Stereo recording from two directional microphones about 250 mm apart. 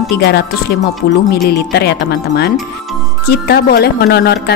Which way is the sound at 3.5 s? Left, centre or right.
Left.